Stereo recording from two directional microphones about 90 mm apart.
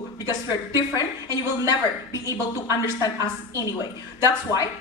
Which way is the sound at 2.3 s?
40° left (ahead or behind).